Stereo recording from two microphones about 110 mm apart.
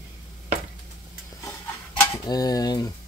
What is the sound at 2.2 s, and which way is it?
Speech, 35° left (ahead or behind).